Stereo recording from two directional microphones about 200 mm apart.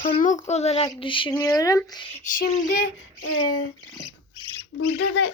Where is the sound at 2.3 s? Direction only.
45° left (ahead or behind).